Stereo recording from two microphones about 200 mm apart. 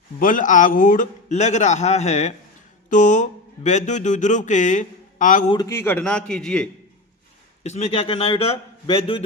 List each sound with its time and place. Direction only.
0.2 s speech: 40° left (ahead or behind)
5.5 s a man's voice: 20° left (ahead or behind)
7.6 s a man's voice: 35° left (ahead or behind)